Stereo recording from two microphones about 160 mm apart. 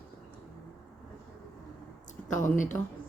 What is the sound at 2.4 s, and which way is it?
Speech, 55° left (ahead or behind).